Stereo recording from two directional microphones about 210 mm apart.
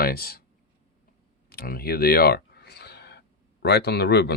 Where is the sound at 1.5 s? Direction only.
45° left (ahead or behind).